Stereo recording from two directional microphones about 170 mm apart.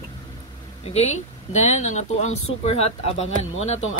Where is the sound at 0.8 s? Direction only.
40° left (ahead or behind).